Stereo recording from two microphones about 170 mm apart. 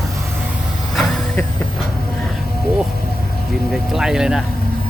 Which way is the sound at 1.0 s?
5° left (ahead or behind).